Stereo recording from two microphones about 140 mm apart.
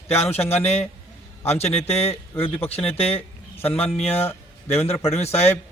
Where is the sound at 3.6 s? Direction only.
10° left (ahead or behind).